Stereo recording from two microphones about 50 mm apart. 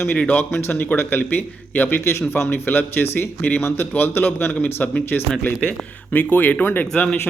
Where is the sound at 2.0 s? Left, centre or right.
Left.